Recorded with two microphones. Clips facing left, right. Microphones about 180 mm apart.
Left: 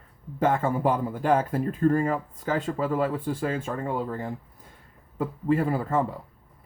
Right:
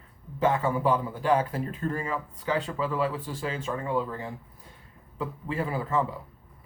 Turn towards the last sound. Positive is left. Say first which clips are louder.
# left 3 dB
turn(degrees=50)  # may be behind; listen again after turning